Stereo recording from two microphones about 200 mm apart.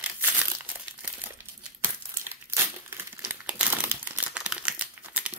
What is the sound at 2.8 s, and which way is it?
Crumpling, 10° right (ahead or behind).